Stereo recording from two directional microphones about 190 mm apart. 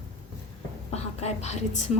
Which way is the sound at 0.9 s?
35° left (ahead or behind).